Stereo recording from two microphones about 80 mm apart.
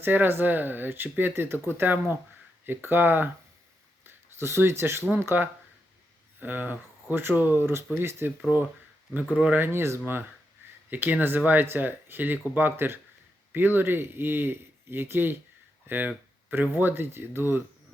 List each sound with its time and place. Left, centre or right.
0.0 s speech: right
9.6 s speech: right